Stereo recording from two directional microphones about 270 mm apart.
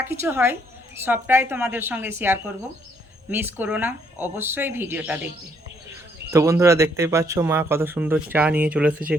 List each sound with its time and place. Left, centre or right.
0.0 s speech: centre
6.3 s speech: centre